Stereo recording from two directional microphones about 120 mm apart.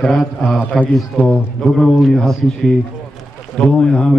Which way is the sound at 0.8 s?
10° left (ahead or behind).